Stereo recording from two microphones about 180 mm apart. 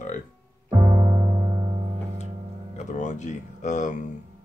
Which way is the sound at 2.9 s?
40° left (ahead or behind).